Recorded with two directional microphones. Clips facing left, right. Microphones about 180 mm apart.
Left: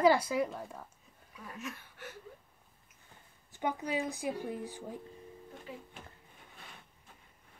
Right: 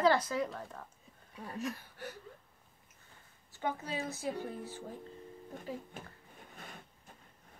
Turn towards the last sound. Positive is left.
turn(degrees=-40)  # may be behind; listen again after turning